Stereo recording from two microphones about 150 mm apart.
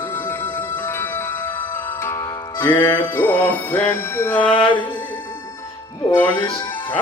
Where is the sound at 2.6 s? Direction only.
20° left (ahead or behind).